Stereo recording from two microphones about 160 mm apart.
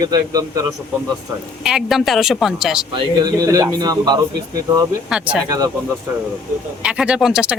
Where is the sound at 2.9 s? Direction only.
25° right (ahead or behind).